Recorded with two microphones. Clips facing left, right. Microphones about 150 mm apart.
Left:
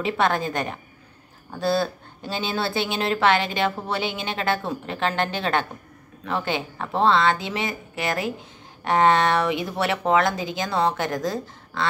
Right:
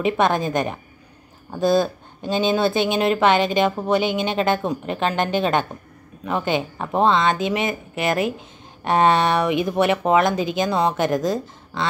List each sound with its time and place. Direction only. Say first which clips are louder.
0.0 s a woman's voice: right 3 dB; 20° right (ahead or behind)